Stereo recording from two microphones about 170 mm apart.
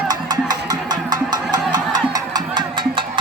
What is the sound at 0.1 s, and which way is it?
Music, 25° right (ahead or behind).